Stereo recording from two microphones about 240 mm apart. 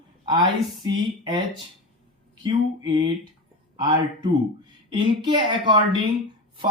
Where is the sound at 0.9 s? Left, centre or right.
Centre.